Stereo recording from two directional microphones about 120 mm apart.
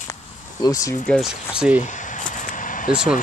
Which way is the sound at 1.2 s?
10° right (ahead or behind).